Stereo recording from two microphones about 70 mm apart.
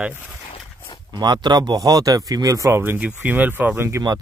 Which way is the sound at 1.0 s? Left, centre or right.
Right.